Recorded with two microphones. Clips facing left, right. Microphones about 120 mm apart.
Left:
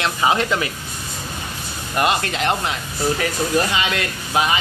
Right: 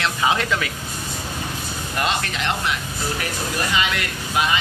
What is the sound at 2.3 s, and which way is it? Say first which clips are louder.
Speech: left 3 dB; 25° left (ahead or behind).